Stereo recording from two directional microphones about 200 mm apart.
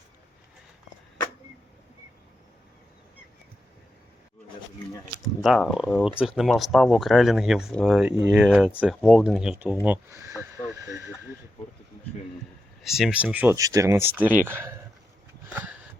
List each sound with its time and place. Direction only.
5.2 s speech: centre (ahead or behind)
10.8 s a sound: 15° right (ahead or behind)
12.8 s speech: centre (ahead or behind)